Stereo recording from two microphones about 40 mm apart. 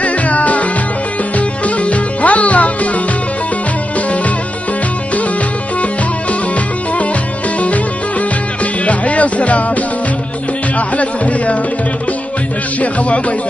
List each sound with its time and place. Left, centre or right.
0.0 s music: left
1.8 s music: left
8.8 s music: left
11.0 s speech: left